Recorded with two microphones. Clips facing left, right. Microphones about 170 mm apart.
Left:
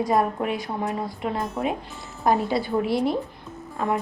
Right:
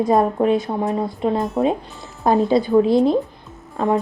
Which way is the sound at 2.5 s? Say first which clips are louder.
Right 8 dB; 20° right (ahead or behind).